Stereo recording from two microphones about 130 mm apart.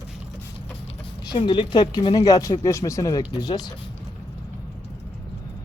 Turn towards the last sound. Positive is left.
turn(degrees=30)  # may be behind; listen again after turning